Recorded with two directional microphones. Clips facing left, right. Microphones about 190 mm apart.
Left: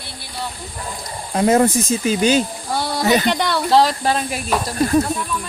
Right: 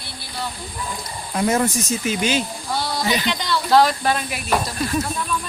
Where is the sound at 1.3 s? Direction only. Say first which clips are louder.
Left 5 dB; 30° left (ahead or behind).